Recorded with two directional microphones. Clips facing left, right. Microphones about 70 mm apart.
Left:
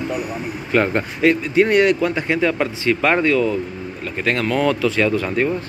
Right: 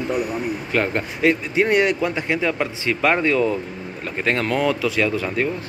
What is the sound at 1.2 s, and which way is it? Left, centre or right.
Speech, centre.